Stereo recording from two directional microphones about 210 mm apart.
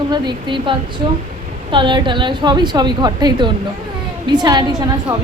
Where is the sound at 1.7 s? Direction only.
20° right (ahead or behind).